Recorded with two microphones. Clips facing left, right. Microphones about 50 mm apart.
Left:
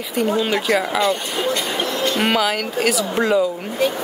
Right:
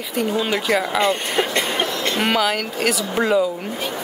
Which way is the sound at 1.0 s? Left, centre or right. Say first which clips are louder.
Even; right.